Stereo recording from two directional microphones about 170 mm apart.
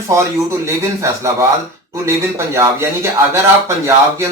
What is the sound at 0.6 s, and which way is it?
Speech, 15° right (ahead or behind).